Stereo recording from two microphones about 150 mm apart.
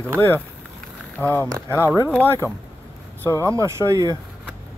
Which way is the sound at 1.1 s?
10° left (ahead or behind).